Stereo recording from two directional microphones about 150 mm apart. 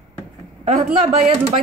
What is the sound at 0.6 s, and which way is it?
Speech, 45° right (ahead or behind).